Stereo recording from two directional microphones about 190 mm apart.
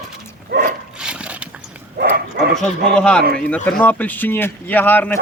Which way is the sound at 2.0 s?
55° right (ahead or behind).